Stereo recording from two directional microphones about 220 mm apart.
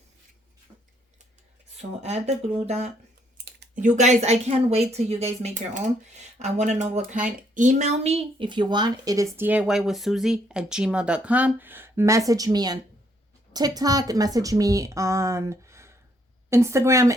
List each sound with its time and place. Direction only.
0.7 s scissors: 10° right (ahead or behind)
1.8 s a woman's voice: 30° right (ahead or behind)
3.3 s a sound: 45° right (ahead or behind)
3.9 s a woman's voice: 30° right (ahead or behind); by 17.2 s 15° right (ahead or behind)